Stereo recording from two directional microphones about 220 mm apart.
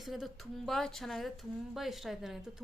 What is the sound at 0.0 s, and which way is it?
A woman's voice, centre (ahead or behind).